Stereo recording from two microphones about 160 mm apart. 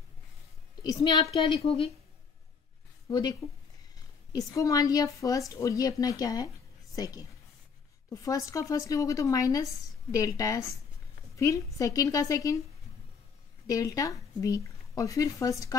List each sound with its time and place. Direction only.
0.8 s a woman's voice: 30° left (ahead or behind)
3.1 s speech: 25° left (ahead or behind)
8.1 s speech: 20° left (ahead or behind)
13.7 s speech: 20° left (ahead or behind)